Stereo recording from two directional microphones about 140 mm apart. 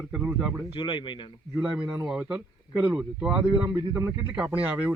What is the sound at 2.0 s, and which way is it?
Speech, 5° right (ahead or behind).